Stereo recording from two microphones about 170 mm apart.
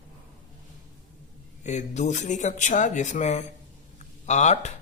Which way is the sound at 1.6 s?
45° left (ahead or behind).